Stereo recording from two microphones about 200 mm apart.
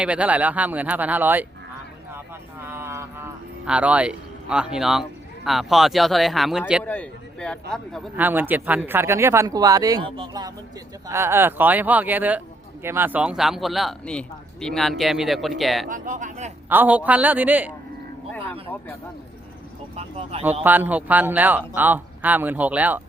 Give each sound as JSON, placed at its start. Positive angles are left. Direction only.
{"t": 0.0, "sound": "speech", "side_deg": -5}
{"t": 2.1, "sound": "a sound", "side_deg": -10}
{"t": 3.7, "sound": "speech", "side_deg": -5}
{"t": 6.8, "sound": "speech", "side_deg": 5}
{"t": 8.1, "sound": "speech", "side_deg": -10}
{"t": 15.9, "sound": "speech", "side_deg": -40}
{"t": 16.6, "sound": "speech", "side_deg": -10}
{"t": 20.0, "sound": "speech", "side_deg": -30}
{"t": 20.7, "sound": "speech", "side_deg": -10}